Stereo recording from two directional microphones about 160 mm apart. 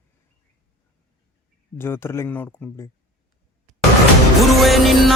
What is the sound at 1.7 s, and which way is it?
Speech, 15° left (ahead or behind).